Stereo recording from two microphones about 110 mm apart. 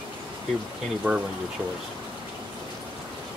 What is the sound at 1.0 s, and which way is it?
Speech, 15° right (ahead or behind).